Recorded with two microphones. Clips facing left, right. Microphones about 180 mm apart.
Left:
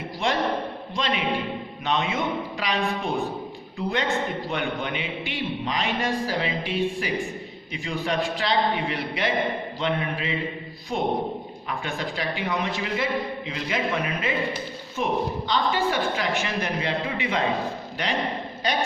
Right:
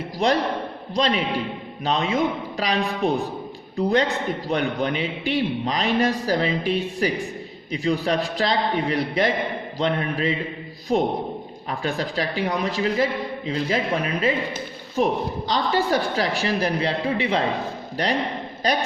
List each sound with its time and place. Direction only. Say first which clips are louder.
0.2 s a man's voice: right 3 dB; 40° right (ahead or behind)